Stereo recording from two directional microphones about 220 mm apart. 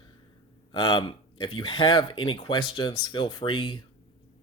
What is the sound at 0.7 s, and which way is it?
Speech, 20° left (ahead or behind).